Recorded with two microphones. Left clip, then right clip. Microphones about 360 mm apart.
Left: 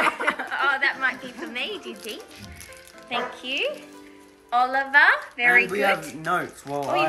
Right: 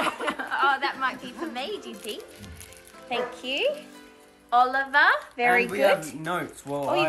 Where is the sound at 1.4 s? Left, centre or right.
Right.